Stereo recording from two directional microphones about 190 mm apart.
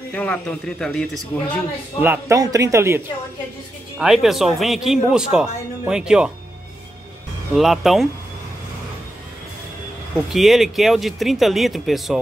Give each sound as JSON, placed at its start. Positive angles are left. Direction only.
{"t": 0.1, "sound": "speech", "side_deg": 5}
{"t": 2.0, "sound": "speech", "side_deg": -15}
{"t": 4.0, "sound": "speech", "side_deg": 0}
{"t": 7.5, "sound": "speech", "side_deg": 0}
{"t": 10.3, "sound": "speech", "side_deg": 0}